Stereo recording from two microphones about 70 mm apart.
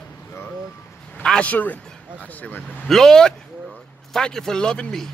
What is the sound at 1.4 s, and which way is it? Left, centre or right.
Speech, left.